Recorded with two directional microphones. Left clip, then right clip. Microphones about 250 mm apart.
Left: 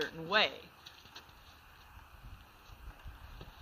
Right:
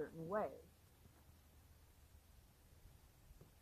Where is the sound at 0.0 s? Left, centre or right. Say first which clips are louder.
Left 12 dB; centre.